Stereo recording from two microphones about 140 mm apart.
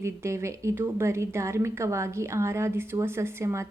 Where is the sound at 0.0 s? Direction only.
20° right (ahead or behind).